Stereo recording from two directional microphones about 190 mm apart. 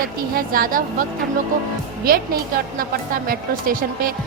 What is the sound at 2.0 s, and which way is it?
Speech, 50° right (ahead or behind).